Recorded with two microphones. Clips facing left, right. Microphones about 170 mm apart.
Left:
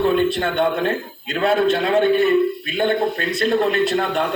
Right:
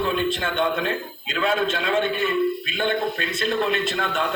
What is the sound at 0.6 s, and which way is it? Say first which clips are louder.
A man's voice: left 3 dB; 50° left (ahead or behind).